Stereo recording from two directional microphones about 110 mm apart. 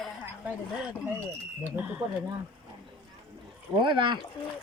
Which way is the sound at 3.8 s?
45° right (ahead or behind).